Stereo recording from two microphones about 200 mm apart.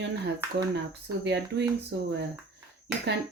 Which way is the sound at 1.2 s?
60° right (ahead or behind).